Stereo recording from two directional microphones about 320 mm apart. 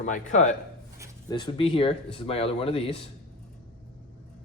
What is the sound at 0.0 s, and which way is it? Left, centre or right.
A man's voice, left.